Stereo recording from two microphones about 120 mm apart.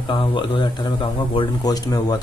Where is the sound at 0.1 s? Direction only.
45° left (ahead or behind).